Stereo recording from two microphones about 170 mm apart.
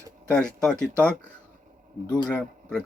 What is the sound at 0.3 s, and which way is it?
Speech, 5° left (ahead or behind).